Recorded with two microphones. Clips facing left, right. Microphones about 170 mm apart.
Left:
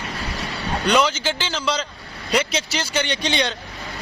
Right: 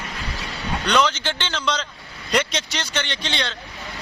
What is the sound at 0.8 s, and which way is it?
Speech, 10° left (ahead or behind).